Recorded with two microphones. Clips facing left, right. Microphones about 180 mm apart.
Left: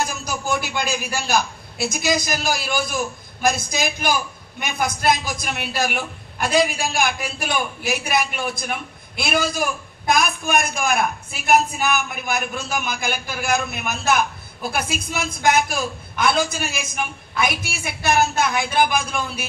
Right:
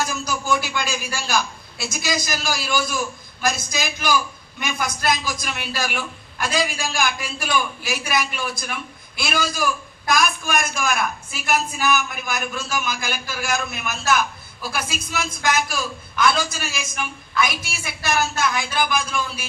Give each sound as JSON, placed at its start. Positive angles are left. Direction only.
{"t": 0.3, "sound": "a woman's voice", "side_deg": 60}